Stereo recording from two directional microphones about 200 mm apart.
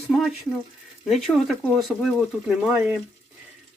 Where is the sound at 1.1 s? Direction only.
Centre (ahead or behind).